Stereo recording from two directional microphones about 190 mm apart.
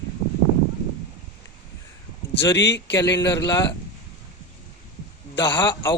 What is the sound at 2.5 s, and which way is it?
Speech, 65° left (ahead or behind).